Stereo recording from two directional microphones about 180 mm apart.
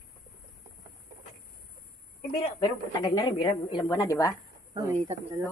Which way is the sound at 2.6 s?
25° left (ahead or behind).